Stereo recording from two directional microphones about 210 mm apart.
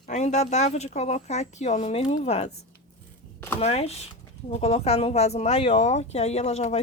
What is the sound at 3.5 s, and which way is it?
Speech, 30° left (ahead or behind).